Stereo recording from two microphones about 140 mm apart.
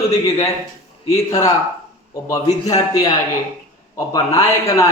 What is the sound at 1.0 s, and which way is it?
A man's voice, 25° left (ahead or behind).